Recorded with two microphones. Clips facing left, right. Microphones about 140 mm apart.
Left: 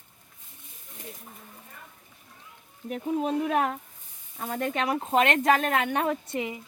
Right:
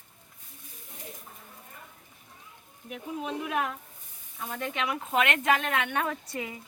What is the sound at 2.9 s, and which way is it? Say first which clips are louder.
Speech: left 7 dB; 40° left (ahead or behind).